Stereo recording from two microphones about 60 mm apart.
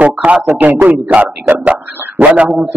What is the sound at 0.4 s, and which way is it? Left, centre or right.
A man's voice, right.